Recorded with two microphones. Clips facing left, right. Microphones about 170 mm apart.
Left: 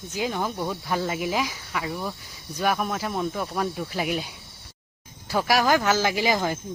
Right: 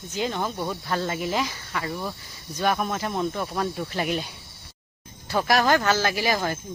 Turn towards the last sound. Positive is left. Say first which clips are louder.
# left 1 dB
turn(degrees=15)  # may be behind; listen again after turning